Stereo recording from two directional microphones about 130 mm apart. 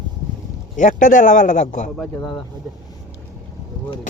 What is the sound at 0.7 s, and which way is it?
Speech, 75° left (ahead or behind).